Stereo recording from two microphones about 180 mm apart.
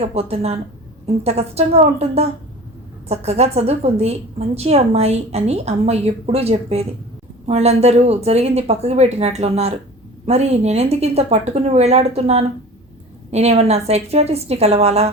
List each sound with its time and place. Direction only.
0.1 s a woman's voice: 35° right (ahead or behind)